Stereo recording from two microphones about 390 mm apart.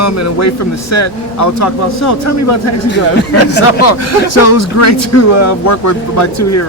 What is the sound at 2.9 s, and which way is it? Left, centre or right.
Speech, left.